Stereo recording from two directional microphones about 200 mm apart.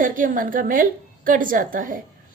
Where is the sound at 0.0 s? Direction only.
40° right (ahead or behind).